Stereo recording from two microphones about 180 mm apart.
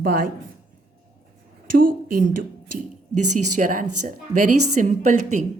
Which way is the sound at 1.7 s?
50° right (ahead or behind).